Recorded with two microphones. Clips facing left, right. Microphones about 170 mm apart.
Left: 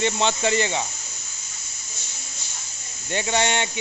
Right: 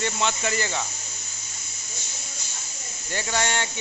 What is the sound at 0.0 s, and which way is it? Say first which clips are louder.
Speech: left 4 dB; 30° left (ahead or behind).